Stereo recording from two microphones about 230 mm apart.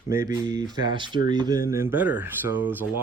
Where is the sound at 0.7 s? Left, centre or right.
Centre.